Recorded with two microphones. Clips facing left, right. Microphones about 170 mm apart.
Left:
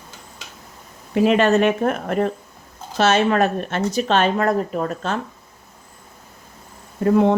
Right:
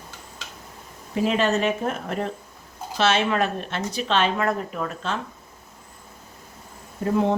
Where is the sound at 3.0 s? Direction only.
45° left (ahead or behind).